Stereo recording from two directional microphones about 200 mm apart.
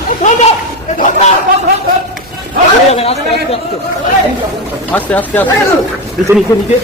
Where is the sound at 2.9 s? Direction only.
30° left (ahead or behind).